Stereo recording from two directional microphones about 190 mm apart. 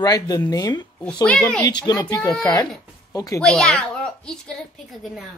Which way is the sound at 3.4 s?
5° left (ahead or behind).